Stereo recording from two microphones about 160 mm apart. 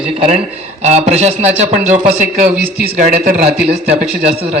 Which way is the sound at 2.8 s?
65° right (ahead or behind).